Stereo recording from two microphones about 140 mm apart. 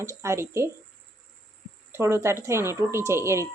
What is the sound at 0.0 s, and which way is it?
Speech, 20° right (ahead or behind).